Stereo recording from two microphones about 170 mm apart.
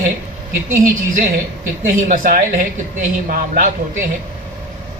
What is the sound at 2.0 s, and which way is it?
A man's voice, 55° right (ahead or behind).